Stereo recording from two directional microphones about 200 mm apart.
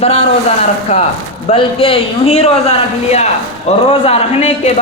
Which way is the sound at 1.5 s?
25° left (ahead or behind).